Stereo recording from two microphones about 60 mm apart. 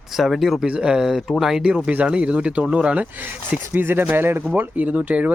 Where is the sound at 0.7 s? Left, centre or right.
Centre.